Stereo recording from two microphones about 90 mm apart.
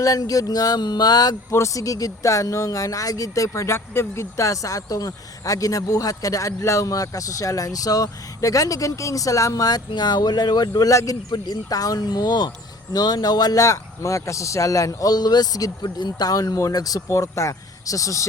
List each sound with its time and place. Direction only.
0.0 s speech: 40° left (ahead or behind)
1.5 s speech: 30° left (ahead or behind)